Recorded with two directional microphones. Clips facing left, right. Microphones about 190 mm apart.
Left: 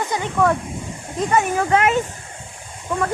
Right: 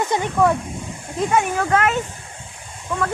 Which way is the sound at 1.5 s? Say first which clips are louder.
Left 1 dB; 15° left (ahead or behind).